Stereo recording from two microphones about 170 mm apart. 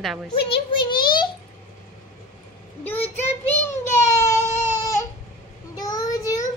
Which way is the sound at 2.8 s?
10° left (ahead or behind).